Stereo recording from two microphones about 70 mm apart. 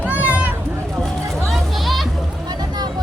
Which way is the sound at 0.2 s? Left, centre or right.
Right.